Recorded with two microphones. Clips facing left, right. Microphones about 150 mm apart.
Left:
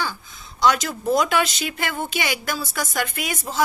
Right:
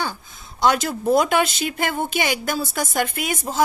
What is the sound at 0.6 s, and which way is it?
A woman's voice, 50° right (ahead or behind).